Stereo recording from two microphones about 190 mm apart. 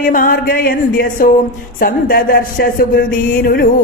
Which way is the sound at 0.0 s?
45° left (ahead or behind).